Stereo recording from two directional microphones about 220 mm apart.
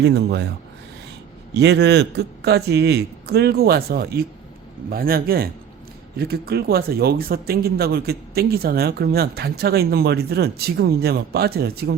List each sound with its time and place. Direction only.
0.0 s speech: 50° right (ahead or behind)
1.5 s speech: 50° right (ahead or behind)